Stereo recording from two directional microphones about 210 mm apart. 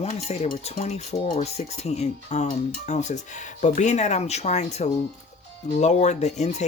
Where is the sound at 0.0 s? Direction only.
30° left (ahead or behind).